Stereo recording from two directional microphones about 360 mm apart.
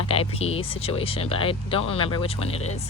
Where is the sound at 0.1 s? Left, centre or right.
Centre.